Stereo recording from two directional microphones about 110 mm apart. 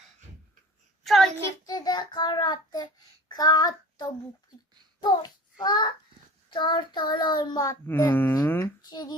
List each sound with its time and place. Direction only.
1.0 s child singing: centre (ahead or behind)
1.6 s child singing: 35° left (ahead or behind)
5.0 s a child's voice: 40° left (ahead or behind)
6.5 s child singing: 45° left (ahead or behind)
7.9 s speech: 20° left (ahead or behind)
8.8 s child singing: 40° left (ahead or behind)